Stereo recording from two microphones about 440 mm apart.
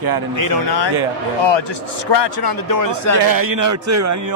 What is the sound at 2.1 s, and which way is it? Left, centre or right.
Speech, left.